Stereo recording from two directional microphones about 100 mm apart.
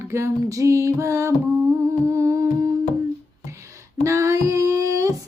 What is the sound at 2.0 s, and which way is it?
Humming, 30° right (ahead or behind).